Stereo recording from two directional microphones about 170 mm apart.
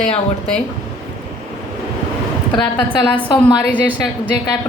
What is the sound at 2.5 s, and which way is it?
A woman's voice, 30° left (ahead or behind).